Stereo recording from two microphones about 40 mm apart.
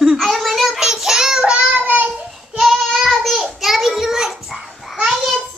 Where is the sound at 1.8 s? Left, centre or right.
Right.